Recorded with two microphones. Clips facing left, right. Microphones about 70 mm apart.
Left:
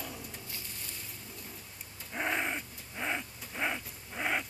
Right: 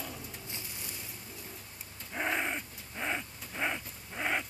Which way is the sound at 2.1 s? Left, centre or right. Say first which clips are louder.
Even; centre.